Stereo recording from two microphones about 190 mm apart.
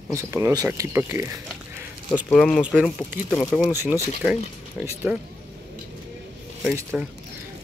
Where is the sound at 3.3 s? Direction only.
5° left (ahead or behind).